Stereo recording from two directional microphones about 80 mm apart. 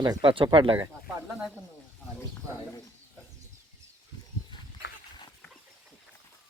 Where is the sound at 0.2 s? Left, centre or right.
Right.